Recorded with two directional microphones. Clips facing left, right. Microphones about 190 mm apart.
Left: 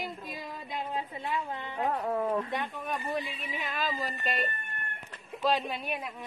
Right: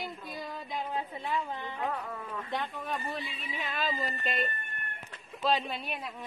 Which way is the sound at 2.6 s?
15° left (ahead or behind).